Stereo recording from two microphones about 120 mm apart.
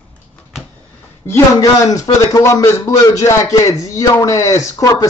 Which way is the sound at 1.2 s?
20° left (ahead or behind).